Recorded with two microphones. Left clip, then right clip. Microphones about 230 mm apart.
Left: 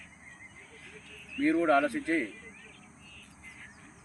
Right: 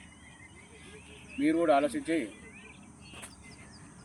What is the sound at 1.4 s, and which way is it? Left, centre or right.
Speech, centre.